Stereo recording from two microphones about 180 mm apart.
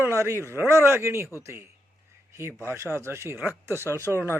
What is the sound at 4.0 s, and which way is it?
Speech, 10° left (ahead or behind).